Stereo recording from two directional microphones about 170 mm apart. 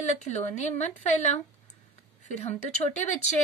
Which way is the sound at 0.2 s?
45° left (ahead or behind).